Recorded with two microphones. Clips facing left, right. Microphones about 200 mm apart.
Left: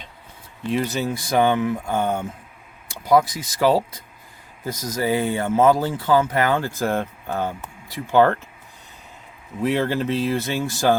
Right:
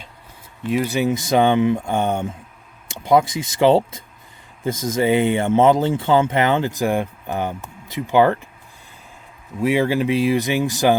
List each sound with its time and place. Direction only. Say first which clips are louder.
0.7 s speech: right 4 dB; 10° right (ahead or behind)
9.6 s speech: right 3 dB; 10° right (ahead or behind)